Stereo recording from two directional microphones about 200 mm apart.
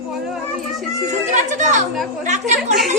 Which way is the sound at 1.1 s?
40° right (ahead or behind).